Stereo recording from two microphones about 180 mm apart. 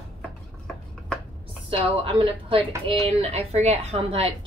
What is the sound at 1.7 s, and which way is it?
A woman's voice, 30° right (ahead or behind).